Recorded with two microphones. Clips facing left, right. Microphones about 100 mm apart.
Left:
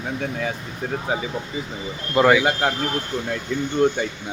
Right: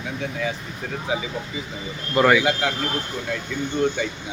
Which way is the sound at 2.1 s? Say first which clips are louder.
Left 1 dB; 20° left (ahead or behind).